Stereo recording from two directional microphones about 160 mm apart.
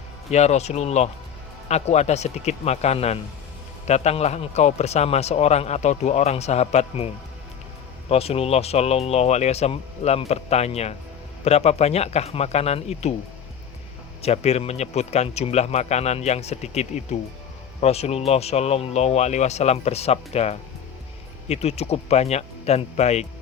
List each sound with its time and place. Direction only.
0.3 s a man's voice: 45° left (ahead or behind)
8.1 s speech: 40° left (ahead or behind)
14.2 s a man's voice: 40° left (ahead or behind)